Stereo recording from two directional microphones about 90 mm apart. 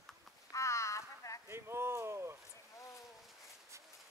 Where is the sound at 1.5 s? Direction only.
30° right (ahead or behind).